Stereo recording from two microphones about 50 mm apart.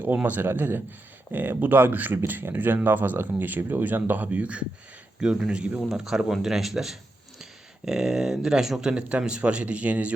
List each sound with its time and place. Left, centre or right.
0.0 s speech: right
5.2 s speech: centre
5.8 s speech: centre
8.9 s speech: right